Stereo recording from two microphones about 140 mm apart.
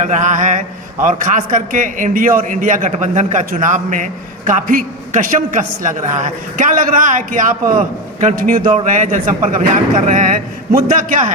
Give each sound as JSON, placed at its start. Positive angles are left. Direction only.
{"t": 0.0, "sound": "mantra", "side_deg": -60}
{"t": 1.0, "sound": "a man's voice", "side_deg": -65}
{"t": 8.7, "sound": "a man's voice", "side_deg": -65}